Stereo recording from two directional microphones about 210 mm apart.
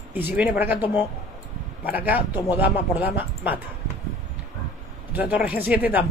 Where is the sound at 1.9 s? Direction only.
10° right (ahead or behind).